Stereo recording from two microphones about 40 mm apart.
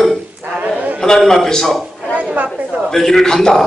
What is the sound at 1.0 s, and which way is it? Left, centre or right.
Speech, centre.